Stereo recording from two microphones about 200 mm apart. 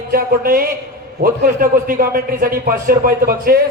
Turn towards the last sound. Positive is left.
turn(degrees=-50)  # may be behind; listen again after turning